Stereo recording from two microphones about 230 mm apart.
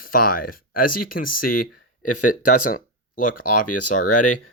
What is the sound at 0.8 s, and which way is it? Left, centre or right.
Speech, left.